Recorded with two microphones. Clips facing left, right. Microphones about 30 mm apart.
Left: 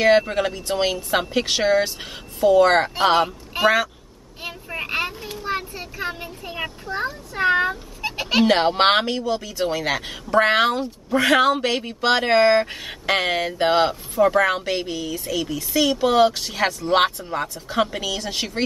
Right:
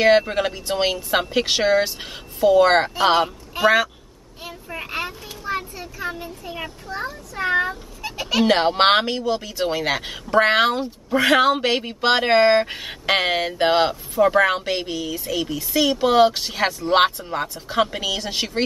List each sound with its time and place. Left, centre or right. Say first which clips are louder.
0.0 s speech: right 1 dB; centre
3.6 s speech: right 1 dB; centre
4.6 s speech: left 3 dB; centre
5.3 s a sound: right 2 dB; left
5.8 s speech: even; left
8.5 s speech: right 2 dB; centre